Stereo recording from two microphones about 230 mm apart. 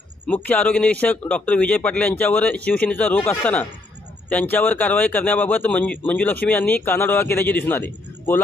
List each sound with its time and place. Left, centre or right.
0.3 s a man's voice: centre